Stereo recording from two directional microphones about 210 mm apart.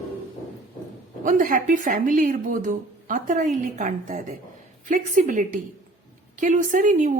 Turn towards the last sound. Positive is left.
turn(degrees=-35)  # may be behind; listen again after turning